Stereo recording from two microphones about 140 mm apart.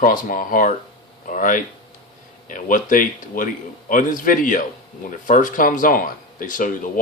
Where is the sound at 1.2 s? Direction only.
70° left (ahead or behind).